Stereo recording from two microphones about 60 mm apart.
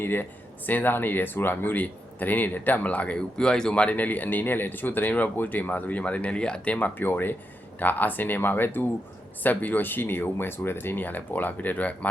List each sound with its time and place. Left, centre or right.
0.0 s speech: left
3.3 s speech: centre
6.7 s speech: left